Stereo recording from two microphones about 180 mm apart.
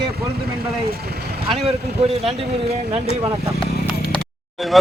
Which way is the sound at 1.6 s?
35° right (ahead or behind).